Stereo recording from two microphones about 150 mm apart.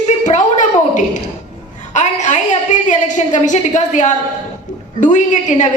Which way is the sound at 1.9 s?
50° left (ahead or behind).